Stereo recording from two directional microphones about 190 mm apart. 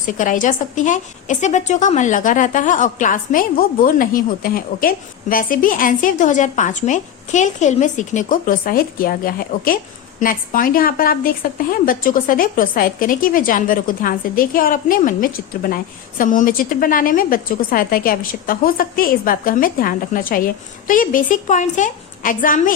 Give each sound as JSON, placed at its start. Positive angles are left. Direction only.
{"t": 0.0, "sound": "a woman's voice", "side_deg": 45}